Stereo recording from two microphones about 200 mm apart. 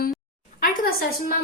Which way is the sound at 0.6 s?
45° left (ahead or behind).